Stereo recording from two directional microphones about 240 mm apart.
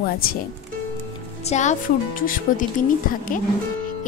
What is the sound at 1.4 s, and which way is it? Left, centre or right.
Speech, left.